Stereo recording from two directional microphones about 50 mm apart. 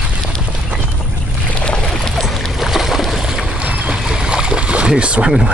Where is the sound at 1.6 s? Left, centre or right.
Centre.